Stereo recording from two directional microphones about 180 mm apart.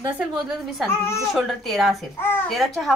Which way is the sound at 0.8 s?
15° left (ahead or behind).